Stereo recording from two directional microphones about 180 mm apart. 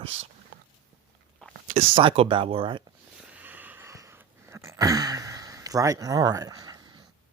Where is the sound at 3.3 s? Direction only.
10° right (ahead or behind).